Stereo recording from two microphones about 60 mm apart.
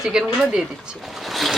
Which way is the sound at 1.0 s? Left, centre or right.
Centre.